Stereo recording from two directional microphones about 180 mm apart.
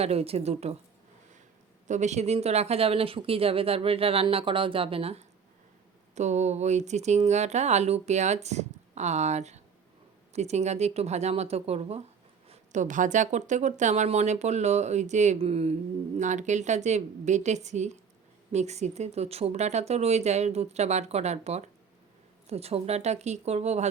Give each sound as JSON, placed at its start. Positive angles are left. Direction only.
{"t": 0.0, "sound": "speech", "side_deg": -35}
{"t": 1.9, "sound": "speech", "side_deg": -40}